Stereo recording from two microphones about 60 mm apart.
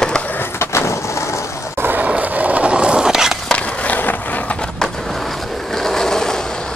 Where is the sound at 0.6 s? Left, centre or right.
Left.